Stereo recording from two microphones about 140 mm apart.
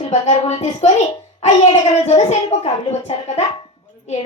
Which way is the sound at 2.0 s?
55° left (ahead or behind).